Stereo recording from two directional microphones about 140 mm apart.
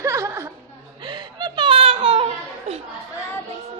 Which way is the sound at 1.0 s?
30° right (ahead or behind).